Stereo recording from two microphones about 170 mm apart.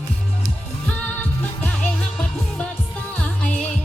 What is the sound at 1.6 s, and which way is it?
Music, 5° left (ahead or behind).